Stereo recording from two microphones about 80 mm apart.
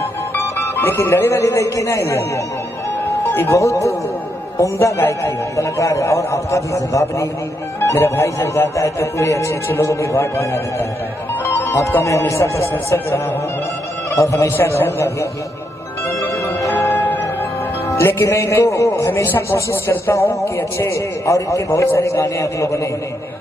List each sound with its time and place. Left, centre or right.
0.0 s music: left
1.4 s a man's voice: left
11.4 s music: left
12.0 s a man's voice: left
14.1 s a man's voice: left
14.5 s a man's voice: left
16.1 s music: left
16.8 s music: left
18.7 s a man's voice: left
19.2 s a man's voice: left